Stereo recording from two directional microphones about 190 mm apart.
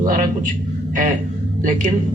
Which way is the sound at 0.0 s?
45° right (ahead or behind).